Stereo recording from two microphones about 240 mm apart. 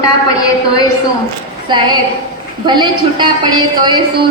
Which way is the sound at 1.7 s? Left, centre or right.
Centre.